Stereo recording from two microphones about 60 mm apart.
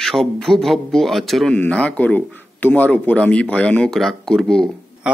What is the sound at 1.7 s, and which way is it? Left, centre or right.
Speech, left.